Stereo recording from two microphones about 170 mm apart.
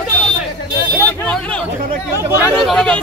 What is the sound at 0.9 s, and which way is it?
Speech, 5° left (ahead or behind).